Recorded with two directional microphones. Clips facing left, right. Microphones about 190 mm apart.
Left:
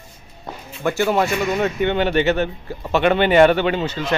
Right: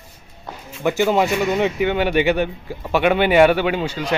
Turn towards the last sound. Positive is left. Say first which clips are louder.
# even
turn(degrees=-10)  # may be behind; listen again after turning